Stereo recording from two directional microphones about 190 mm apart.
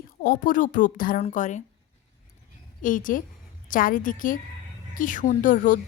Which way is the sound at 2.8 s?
45° left (ahead or behind).